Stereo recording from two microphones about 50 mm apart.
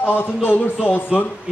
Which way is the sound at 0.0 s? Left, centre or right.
Left.